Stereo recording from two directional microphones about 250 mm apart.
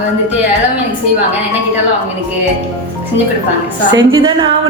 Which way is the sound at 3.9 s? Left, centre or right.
Right.